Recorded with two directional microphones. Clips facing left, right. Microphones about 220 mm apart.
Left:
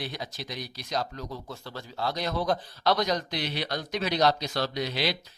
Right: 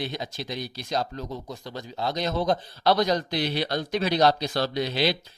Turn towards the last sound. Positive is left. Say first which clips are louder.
# right 4 dB
turn(degrees=-30)  # may be behind; listen again after turning